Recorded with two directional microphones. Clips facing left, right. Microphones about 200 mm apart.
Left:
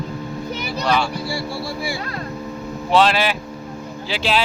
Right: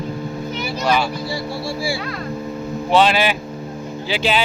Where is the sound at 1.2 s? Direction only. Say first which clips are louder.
Right 1 dB; 20° right (ahead or behind).